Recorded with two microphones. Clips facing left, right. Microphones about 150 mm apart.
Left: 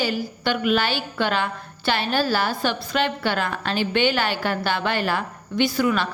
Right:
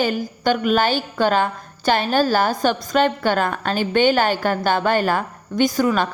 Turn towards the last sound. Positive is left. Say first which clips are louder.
# right 3 dB
turn(degrees=-45)  # may be behind; listen again after turning